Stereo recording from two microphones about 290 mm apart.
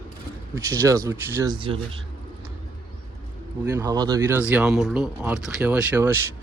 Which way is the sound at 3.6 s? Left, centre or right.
Centre.